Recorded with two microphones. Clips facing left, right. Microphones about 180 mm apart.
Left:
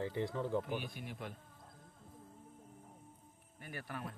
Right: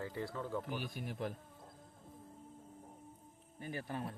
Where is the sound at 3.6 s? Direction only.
20° right (ahead or behind).